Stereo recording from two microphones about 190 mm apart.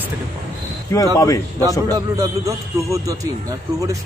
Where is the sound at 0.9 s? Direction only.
15° left (ahead or behind).